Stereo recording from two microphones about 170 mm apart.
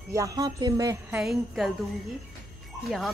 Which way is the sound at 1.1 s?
Centre (ahead or behind).